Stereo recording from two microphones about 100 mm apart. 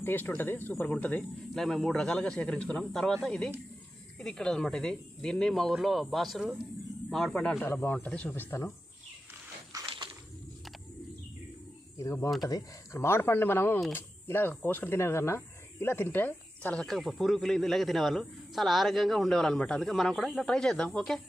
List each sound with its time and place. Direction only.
0.0 s speech: 20° left (ahead or behind)
1.5 s a man's voice: 5° left (ahead or behind)
7.6 s speech: 20° left (ahead or behind)
9.8 s a sound: 60° right (ahead or behind)
11.9 s speech: 30° left (ahead or behind)
13.0 s speech: 25° left (ahead or behind)
16.8 s a man's voice: centre (ahead or behind)